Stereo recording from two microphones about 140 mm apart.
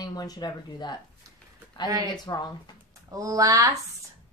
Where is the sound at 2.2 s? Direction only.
30° left (ahead or behind).